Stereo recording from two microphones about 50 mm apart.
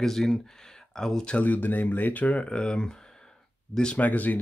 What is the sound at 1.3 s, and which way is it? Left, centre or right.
Speech, left.